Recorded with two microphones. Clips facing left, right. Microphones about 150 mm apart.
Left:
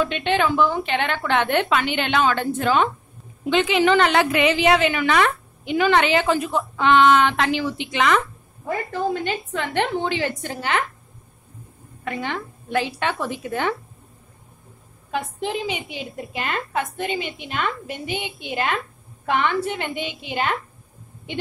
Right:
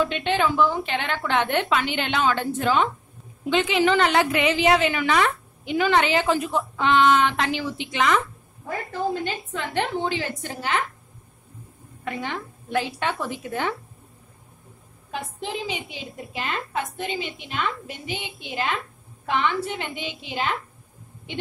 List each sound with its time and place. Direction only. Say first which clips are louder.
0.0 s a woman's voice: left 2 dB; 65° left (ahead or behind)
12.0 s a woman's voice: left 2 dB; 75° left (ahead or behind)
15.6 s a woman's voice: left 3 dB; 60° left (ahead or behind)